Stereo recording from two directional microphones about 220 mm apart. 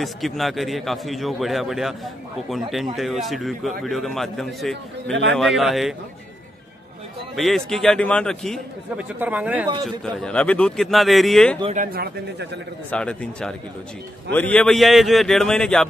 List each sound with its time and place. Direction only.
0.0 s a man's voice: centre (ahead or behind)
7.3 s a man's voice: centre (ahead or behind)
10.0 s a man's voice: 5° left (ahead or behind)
11.6 s speech: 35° right (ahead or behind)
12.9 s a man's voice: 5° left (ahead or behind)